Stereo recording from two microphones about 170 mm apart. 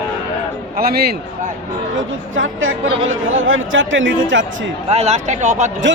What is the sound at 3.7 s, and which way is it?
Speech, 90° right.